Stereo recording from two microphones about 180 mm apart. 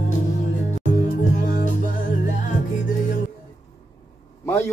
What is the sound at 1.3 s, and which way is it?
Music, 45° left (ahead or behind).